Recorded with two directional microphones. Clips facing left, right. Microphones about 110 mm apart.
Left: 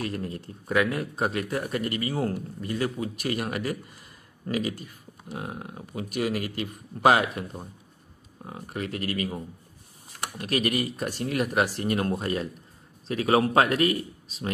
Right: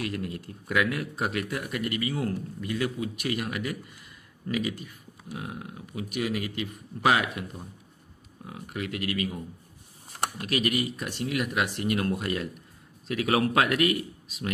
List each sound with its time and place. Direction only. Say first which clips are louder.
0.0 s speech: left 1 dB; 35° left (ahead or behind)
10.4 s speech: left 2 dB; 40° left (ahead or behind)